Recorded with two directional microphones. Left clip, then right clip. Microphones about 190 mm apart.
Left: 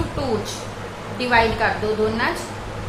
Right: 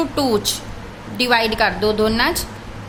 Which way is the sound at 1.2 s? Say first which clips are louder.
Right 2 dB; 65° right (ahead or behind).